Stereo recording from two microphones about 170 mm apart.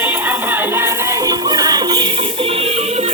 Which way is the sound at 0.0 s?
10° right (ahead or behind).